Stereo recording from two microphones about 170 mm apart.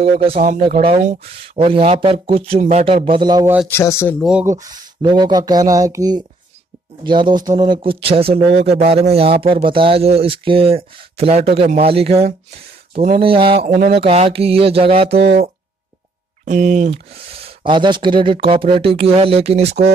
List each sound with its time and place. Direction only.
0.0 s speech: 35° right (ahead or behind)
1.6 s speech: 35° right (ahead or behind)
3.1 s speech: 25° right (ahead or behind)
3.6 s speech: 15° left (ahead or behind)
4.2 s speech: 5° right (ahead or behind)
4.5 s speech: 25° right (ahead or behind); by 13.2 s 45° right (ahead or behind)
13.2 s speech: 30° right (ahead or behind)
16.4 s speech: 45° right (ahead or behind)